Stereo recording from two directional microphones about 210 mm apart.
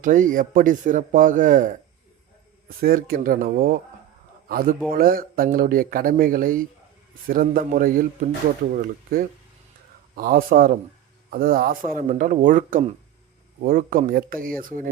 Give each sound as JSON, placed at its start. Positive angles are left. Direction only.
{"t": 0.0, "sound": "a man's voice", "side_deg": -40}